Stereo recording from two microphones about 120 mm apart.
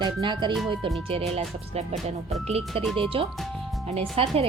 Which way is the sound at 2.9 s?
50° right (ahead or behind).